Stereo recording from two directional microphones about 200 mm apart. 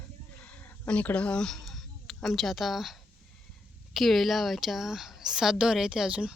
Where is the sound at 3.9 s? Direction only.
Centre (ahead or behind).